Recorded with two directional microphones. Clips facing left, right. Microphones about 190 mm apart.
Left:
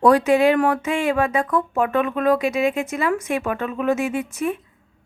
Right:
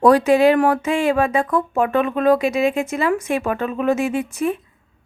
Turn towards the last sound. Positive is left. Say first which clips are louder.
# right 3 dB
turn(degrees=-30)  # may be behind; listen again after turning